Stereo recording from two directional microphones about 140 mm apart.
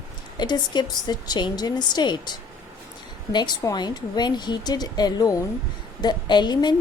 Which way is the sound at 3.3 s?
30° left (ahead or behind).